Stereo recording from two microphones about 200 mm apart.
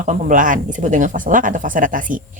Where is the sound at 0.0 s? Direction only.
40° right (ahead or behind).